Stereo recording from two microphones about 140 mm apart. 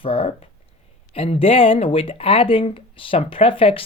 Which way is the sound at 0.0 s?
40° left (ahead or behind).